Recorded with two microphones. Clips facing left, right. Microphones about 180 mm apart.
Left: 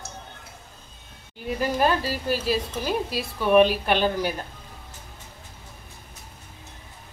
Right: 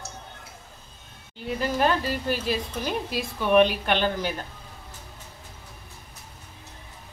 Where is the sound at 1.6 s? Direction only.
10° left (ahead or behind).